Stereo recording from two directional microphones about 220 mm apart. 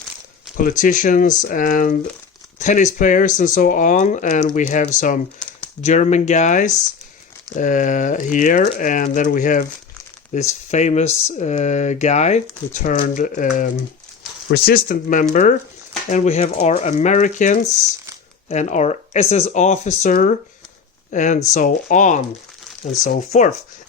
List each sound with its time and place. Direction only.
0.5 s speech: 35° left (ahead or behind)